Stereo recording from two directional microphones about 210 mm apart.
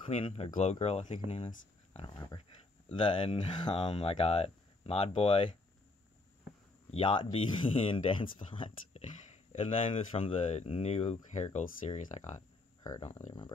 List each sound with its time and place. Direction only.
0.0 s speech: 25° left (ahead or behind)
6.9 s speech: 25° left (ahead or behind)
12.4 s a sound: 15° left (ahead or behind)